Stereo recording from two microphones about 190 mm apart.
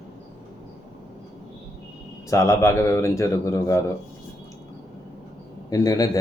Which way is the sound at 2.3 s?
15° left (ahead or behind).